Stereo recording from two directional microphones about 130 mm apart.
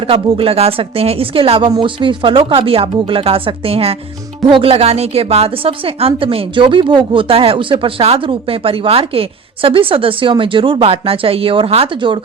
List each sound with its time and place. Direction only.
0.0 s speech: 45° right (ahead or behind)